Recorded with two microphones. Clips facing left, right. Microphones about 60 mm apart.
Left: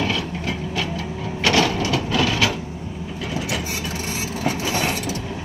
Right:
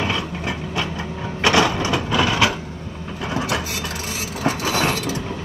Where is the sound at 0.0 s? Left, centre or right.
Right.